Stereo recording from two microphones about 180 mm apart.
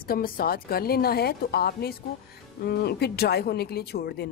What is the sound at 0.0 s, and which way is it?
Speech, 55° left (ahead or behind).